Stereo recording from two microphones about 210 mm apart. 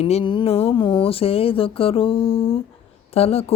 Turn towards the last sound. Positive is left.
turn(degrees=30)  # may be behind; listen again after turning